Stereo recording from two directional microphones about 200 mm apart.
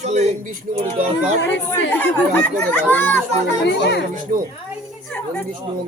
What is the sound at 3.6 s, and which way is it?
Speech, 60° left (ahead or behind).